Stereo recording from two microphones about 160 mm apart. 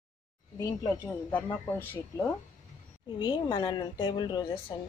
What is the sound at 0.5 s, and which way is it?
A man's voice, 25° left (ahead or behind).